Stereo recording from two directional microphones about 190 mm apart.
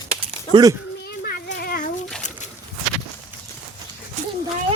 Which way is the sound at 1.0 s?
50° left (ahead or behind).